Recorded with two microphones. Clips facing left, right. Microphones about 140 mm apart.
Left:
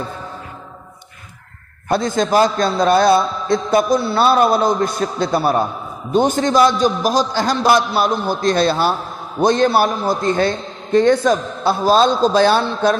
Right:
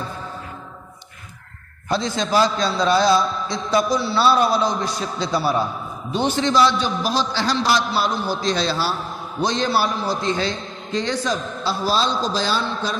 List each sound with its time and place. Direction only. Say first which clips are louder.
1.9 s a man's voice: left 5 dB; 50° left (ahead or behind)